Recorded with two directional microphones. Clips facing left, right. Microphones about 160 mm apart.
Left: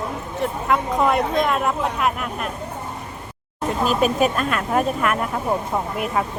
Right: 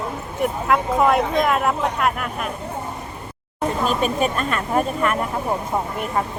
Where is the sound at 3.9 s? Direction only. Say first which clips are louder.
Left 5 dB; 5° left (ahead or behind).